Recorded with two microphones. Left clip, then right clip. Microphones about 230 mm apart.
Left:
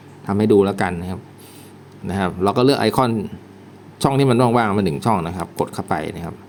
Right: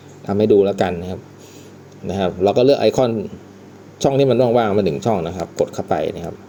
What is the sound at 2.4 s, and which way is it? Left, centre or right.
Speech, left.